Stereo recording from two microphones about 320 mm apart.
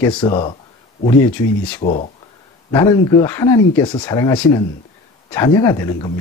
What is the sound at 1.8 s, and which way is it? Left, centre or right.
Speech, left.